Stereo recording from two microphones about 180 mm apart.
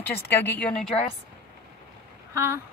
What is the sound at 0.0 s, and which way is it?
A woman's voice, 10° left (ahead or behind).